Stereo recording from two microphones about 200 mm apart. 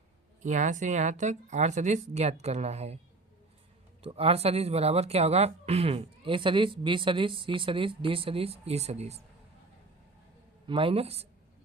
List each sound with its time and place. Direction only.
0.4 s speech: 35° right (ahead or behind)
4.0 s speech: 30° right (ahead or behind)
10.7 s speech: 25° right (ahead or behind)